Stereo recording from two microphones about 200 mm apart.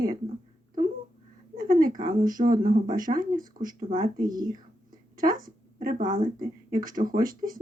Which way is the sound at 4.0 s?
20° right (ahead or behind).